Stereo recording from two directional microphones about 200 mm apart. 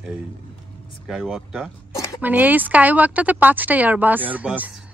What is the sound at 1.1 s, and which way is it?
A woman's voice, centre (ahead or behind).